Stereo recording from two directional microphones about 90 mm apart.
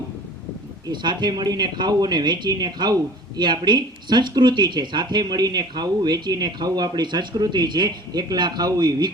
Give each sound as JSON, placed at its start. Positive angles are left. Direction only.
{"t": 0.9, "sound": "speech", "side_deg": -55}